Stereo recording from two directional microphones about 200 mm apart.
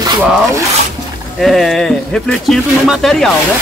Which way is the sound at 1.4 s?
Centre (ahead or behind).